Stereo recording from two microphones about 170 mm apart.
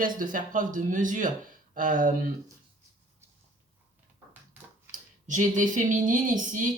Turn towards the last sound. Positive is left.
turn(degrees=-50)  # may be behind; listen again after turning